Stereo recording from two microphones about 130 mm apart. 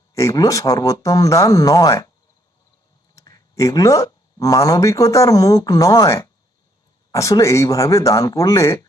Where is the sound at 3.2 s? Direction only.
25° left (ahead or behind).